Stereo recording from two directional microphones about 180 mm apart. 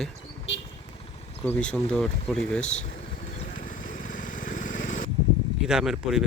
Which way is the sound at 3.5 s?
45° left (ahead or behind).